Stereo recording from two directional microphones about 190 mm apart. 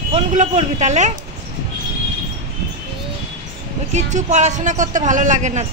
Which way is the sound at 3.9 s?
35° right (ahead or behind).